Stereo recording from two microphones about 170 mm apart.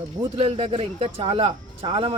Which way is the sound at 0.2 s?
35° right (ahead or behind).